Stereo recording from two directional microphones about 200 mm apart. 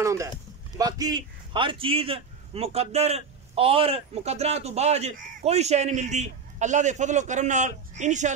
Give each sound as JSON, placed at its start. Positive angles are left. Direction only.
{"t": 0.0, "sound": "a man's voice", "side_deg": -15}